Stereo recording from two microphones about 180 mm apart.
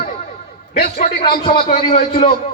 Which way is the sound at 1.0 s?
40° left (ahead or behind).